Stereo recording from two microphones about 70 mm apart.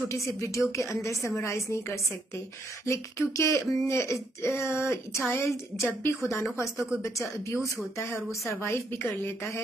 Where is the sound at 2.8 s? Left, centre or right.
Left.